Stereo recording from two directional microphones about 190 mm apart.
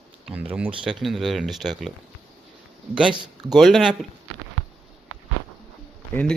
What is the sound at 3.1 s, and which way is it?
Speech, 25° right (ahead or behind).